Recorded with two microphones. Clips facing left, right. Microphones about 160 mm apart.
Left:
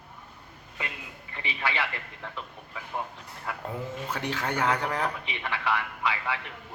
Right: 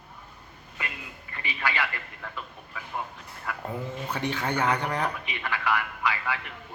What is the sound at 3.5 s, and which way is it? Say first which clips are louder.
Speech: right 1 dB; 25° left (ahead or behind).